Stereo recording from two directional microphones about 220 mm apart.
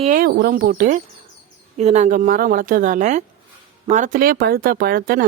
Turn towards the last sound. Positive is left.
turn(degrees=-40)  # may be behind; listen again after turning